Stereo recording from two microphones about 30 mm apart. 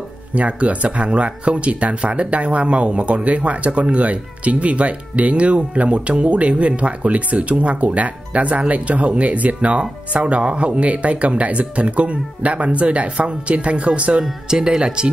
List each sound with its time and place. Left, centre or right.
0.3 s speech: right
9.8 s speech: right
14.5 s speech: right